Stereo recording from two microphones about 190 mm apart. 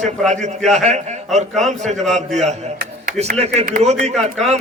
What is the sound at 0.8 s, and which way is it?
A man's voice, 35° right (ahead or behind).